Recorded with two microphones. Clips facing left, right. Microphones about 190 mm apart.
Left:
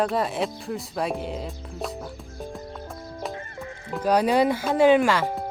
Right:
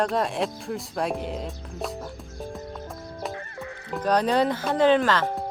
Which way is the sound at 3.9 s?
10° left (ahead or behind).